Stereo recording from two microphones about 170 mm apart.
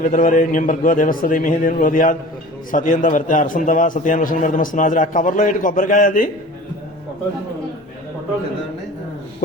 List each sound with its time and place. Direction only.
0.0 s a man's voice: 55° left (ahead or behind)